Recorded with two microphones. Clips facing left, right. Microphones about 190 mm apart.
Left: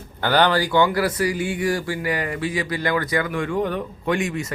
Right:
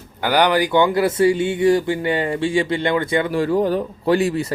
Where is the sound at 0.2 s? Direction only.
10° right (ahead or behind).